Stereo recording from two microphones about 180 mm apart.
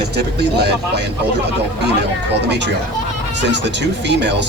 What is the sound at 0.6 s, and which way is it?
Speech, 65° right (ahead or behind).